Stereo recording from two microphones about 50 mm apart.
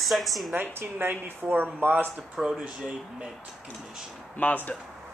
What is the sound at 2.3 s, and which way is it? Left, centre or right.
Speech, centre.